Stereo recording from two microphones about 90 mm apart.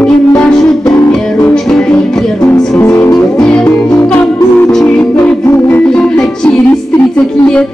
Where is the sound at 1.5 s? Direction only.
10° left (ahead or behind).